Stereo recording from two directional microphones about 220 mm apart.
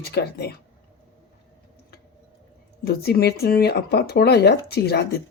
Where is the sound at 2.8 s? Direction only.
45° left (ahead or behind).